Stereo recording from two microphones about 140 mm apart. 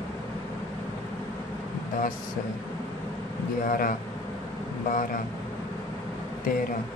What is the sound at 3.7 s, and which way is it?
Speech, 80° left.